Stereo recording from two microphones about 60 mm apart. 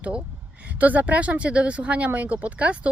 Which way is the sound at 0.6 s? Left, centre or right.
Right.